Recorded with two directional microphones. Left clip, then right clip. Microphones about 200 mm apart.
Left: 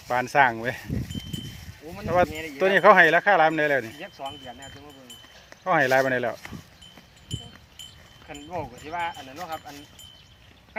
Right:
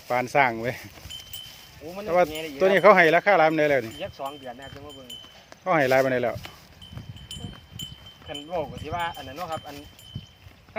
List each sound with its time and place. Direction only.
0.1 s speech: centre (ahead or behind)
2.0 s speech: centre (ahead or behind)
4.0 s speech: 40° right (ahead or behind)
5.6 s speech: centre (ahead or behind)
8.3 s speech: 35° right (ahead or behind)